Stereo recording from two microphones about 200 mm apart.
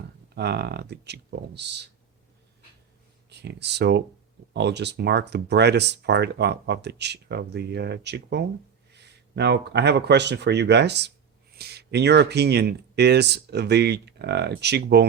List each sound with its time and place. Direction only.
0.3 s speech: 55° right (ahead or behind)
3.2 s speech: 55° right (ahead or behind)